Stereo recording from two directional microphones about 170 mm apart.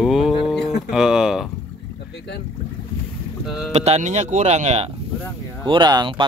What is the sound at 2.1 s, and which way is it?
Speech, 85° left.